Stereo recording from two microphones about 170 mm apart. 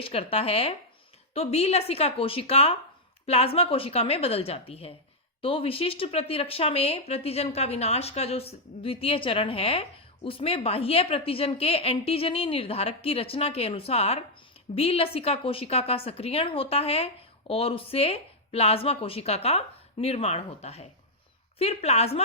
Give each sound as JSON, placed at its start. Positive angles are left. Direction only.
{"t": 0.0, "sound": "speech", "side_deg": 35}